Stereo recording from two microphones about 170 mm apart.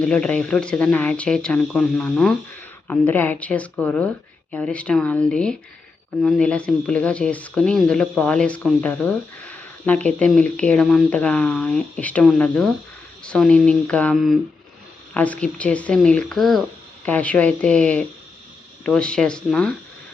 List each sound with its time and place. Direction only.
0.0 s speech: 5° left (ahead or behind)